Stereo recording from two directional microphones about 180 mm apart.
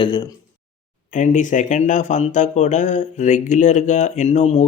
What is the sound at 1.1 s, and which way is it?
Speech, 45° left (ahead or behind).